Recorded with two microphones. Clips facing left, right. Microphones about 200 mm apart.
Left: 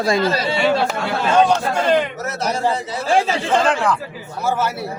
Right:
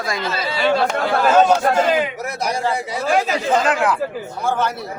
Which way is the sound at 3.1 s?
30° left (ahead or behind).